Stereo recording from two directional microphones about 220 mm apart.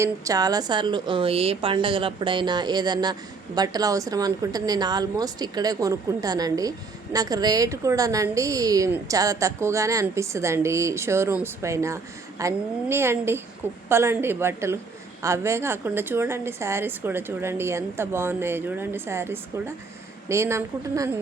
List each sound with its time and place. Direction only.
0.0 s a woman's voice: 15° right (ahead or behind)